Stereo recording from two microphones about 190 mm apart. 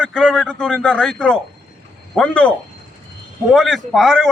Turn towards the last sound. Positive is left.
turn(degrees=0)  # may be behind; listen again after turning